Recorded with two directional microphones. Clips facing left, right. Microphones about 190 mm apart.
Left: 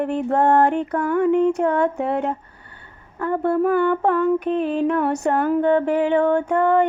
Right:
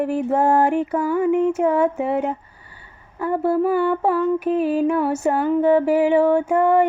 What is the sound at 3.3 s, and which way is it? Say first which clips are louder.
Mantra: even; 5° right (ahead or behind).